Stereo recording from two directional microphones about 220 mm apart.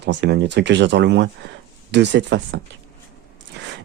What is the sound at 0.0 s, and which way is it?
Speech, 50° right (ahead or behind).